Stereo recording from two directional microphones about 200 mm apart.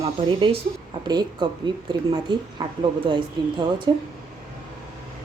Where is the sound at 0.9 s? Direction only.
20° right (ahead or behind).